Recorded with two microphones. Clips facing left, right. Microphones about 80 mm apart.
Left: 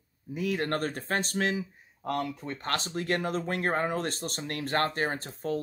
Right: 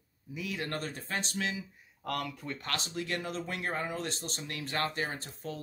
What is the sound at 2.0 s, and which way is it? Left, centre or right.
Speech, left.